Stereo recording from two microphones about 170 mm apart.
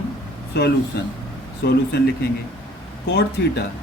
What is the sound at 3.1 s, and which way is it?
Speech, 80° left.